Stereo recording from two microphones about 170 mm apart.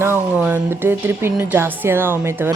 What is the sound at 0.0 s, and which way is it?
Speech, 10° right (ahead or behind).